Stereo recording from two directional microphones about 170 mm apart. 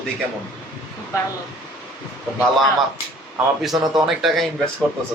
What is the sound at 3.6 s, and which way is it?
Speech, centre (ahead or behind).